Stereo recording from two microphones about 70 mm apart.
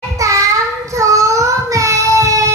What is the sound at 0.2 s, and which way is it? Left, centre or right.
Child singing, right.